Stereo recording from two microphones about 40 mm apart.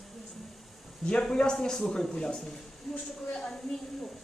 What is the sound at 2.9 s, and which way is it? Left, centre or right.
Speech, centre.